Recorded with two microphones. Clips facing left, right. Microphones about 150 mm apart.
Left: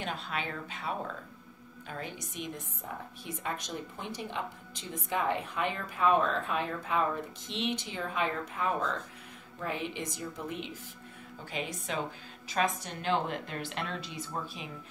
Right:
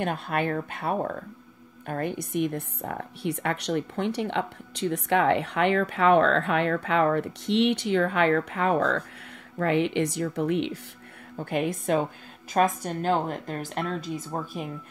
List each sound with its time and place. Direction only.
0.0 s a woman's voice: 55° right (ahead or behind)
11.3 s a woman's voice: 55° right (ahead or behind)